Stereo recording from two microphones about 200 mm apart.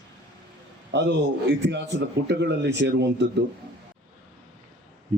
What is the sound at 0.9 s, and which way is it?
A man's voice, 60° right (ahead or behind).